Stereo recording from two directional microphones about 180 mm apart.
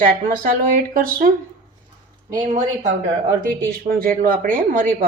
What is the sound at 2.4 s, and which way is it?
Speech, 40° right (ahead or behind).